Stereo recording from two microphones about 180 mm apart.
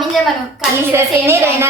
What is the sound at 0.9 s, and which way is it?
Speech, 15° right (ahead or behind).